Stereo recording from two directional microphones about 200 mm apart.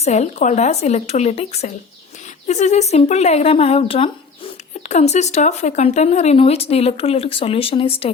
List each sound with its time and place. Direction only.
0.0 s speech: 35° left (ahead or behind)